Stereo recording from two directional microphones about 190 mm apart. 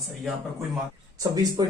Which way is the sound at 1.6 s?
20° right (ahead or behind).